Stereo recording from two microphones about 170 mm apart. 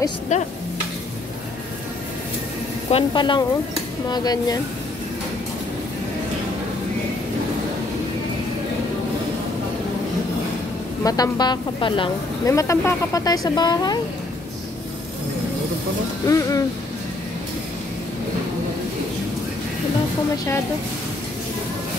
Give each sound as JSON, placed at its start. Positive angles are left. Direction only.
{"t": 0.3, "sound": "stir", "side_deg": 45}
{"t": 2.9, "sound": "speech", "side_deg": 30}
{"t": 11.1, "sound": "speech", "side_deg": 25}
{"t": 12.4, "sound": "speech", "side_deg": 15}
{"t": 16.3, "sound": "speech", "side_deg": 20}